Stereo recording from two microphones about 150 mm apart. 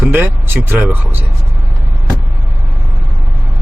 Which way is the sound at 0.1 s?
15° right (ahead or behind).